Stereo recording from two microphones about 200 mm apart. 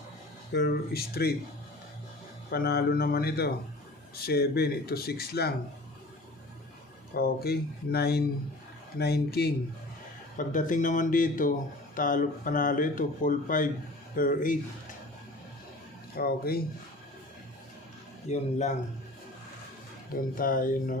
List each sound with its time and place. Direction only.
0.5 s speech: 50° left (ahead or behind)
2.5 s speech: 50° left (ahead or behind)
7.1 s speech: 50° left (ahead or behind)
10.3 s speech: 40° left (ahead or behind)
16.1 s speech: 50° left (ahead or behind)
18.3 s speech: 35° left (ahead or behind)
20.3 s speech: 45° left (ahead or behind)